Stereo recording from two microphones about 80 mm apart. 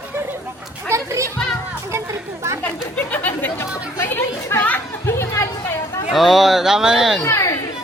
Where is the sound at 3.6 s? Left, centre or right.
Left.